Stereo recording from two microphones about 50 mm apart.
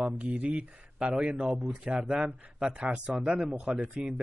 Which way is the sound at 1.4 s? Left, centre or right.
Centre.